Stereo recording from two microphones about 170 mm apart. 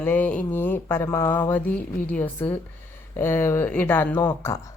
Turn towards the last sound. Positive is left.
turn(degrees=15)  # may be behind; listen again after turning